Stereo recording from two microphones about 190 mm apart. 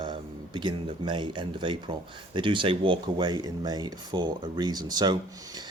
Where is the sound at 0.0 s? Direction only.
25° right (ahead or behind).